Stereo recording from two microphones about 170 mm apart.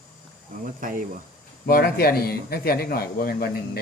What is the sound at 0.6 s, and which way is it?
Speech, 55° right (ahead or behind).